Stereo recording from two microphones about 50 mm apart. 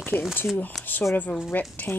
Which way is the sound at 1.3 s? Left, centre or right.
Centre.